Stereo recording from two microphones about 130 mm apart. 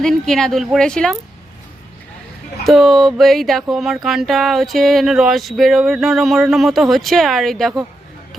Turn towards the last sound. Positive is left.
turn(degrees=0)  # may be behind; listen again after turning